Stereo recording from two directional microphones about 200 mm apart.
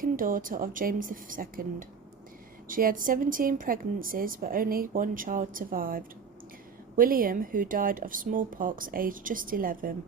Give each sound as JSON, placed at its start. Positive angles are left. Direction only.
{"t": 0.0, "sound": "a woman's voice", "side_deg": -45}
{"t": 2.6, "sound": "a woman's voice", "side_deg": -45}